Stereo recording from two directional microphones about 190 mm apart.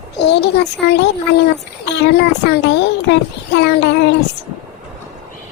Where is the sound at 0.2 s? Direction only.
65° left (ahead or behind).